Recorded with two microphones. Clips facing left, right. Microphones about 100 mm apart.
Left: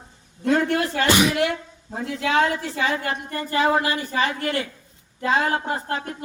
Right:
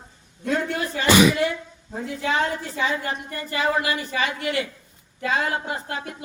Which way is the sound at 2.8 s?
65° left (ahead or behind).